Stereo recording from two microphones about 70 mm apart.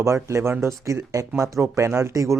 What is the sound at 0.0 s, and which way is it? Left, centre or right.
Speech, right.